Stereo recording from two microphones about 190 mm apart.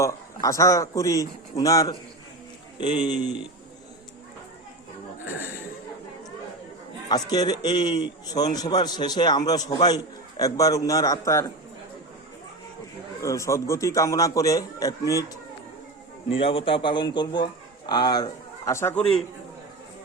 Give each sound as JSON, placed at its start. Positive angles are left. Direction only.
{"t": 0.0, "sound": "a man's voice", "side_deg": 15}
{"t": 7.1, "sound": "a man's voice", "side_deg": 20}
{"t": 13.2, "sound": "a man's voice", "side_deg": 15}
{"t": 16.4, "sound": "a man's voice", "side_deg": 30}